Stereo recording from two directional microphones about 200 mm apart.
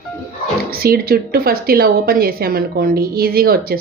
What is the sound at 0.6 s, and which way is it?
Speech, 50° right (ahead or behind).